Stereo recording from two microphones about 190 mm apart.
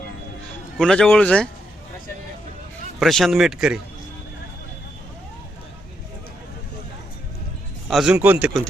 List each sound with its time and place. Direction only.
0.8 s speech: centre (ahead or behind)
3.0 s speech: centre (ahead or behind)
7.9 s speech: centre (ahead or behind)